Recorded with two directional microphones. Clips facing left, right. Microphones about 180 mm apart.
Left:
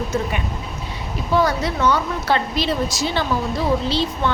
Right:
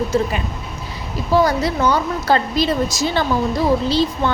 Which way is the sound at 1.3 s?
35° right (ahead or behind).